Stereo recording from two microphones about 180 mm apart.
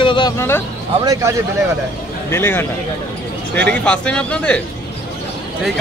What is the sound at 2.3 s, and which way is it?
A man's voice, 10° left (ahead or behind).